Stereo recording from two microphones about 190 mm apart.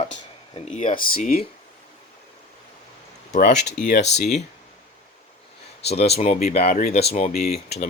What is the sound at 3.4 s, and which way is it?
Speech, 60° left (ahead or behind).